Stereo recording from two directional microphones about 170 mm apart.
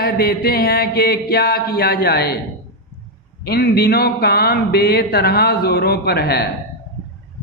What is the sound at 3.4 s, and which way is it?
A man's voice, 65° left (ahead or behind).